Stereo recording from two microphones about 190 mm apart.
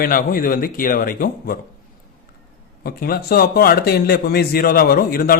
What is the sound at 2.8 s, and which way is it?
Speech, 50° left (ahead or behind).